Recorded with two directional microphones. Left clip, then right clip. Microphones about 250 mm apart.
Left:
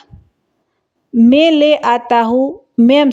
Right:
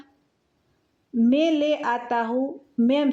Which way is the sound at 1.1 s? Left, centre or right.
Left.